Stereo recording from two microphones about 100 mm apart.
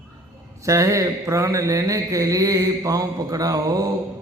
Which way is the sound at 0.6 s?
30° right (ahead or behind).